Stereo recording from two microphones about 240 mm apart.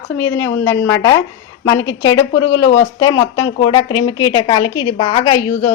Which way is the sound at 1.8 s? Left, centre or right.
Left.